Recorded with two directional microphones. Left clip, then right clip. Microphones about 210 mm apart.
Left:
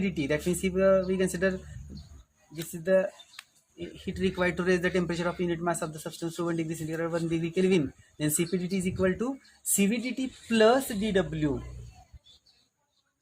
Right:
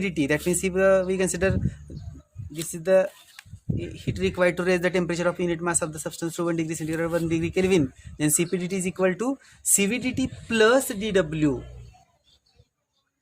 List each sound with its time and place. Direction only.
0.0 s a man's voice: 40° right (ahead or behind)
2.6 s a man's voice: 40° right (ahead or behind)